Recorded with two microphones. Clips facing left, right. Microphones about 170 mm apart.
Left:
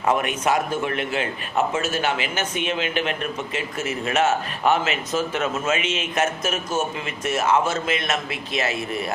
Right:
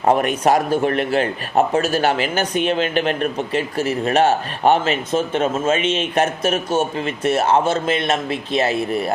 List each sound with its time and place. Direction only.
0.0 s a man's voice: 40° right (ahead or behind)